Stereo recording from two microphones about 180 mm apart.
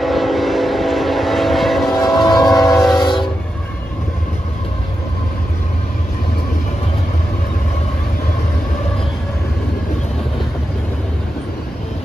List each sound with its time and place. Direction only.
0.0 s vehicle: centre (ahead or behind)
2.0 s train: 20° left (ahead or behind)